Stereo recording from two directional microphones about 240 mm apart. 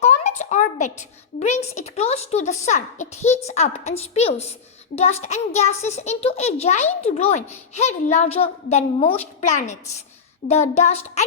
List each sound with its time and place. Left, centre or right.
0.0 s a child's voice: left